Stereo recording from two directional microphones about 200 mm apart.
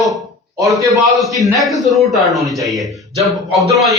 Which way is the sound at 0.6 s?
15° right (ahead or behind).